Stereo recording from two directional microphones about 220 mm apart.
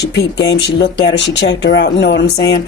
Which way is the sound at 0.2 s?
50° left (ahead or behind).